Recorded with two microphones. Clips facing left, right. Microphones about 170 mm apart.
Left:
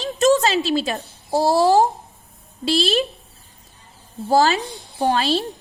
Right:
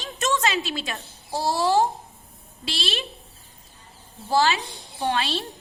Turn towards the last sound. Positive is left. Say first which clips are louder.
# left 6 dB
turn(degrees=40)  # may be behind; listen again after turning